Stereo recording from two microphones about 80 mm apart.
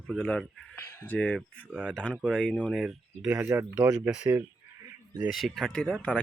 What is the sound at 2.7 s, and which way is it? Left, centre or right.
Speech, centre.